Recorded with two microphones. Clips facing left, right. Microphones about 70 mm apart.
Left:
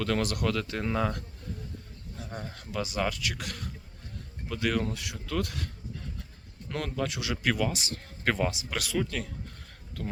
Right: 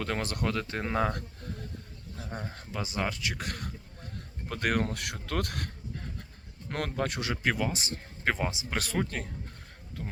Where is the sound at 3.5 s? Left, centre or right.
Right.